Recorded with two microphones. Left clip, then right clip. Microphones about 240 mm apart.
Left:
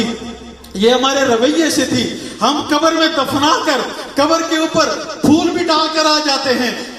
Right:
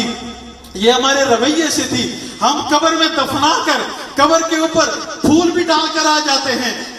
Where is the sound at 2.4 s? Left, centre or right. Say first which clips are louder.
Right 1 dB; left.